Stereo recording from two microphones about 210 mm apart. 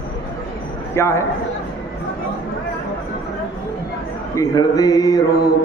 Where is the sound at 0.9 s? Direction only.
10° left (ahead or behind).